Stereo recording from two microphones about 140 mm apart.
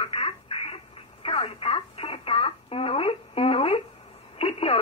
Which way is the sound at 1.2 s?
45° left (ahead or behind).